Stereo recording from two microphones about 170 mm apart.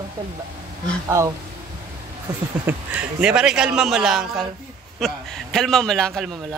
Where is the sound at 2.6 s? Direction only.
10° right (ahead or behind).